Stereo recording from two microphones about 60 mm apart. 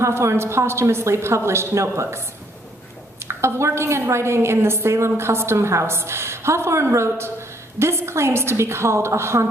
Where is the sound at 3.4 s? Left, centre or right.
Right.